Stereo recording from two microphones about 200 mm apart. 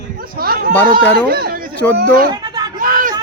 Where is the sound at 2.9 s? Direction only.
40° right (ahead or behind).